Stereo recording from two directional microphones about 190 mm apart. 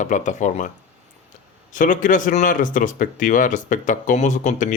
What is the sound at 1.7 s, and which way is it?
Speech, 45° left (ahead or behind).